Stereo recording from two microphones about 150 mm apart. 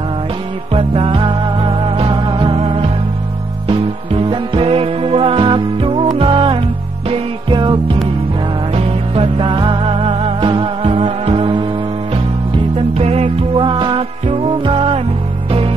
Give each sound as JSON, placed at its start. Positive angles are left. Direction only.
{"t": 0.7, "sound": "music", "side_deg": -35}
{"t": 12.7, "sound": "music", "side_deg": -45}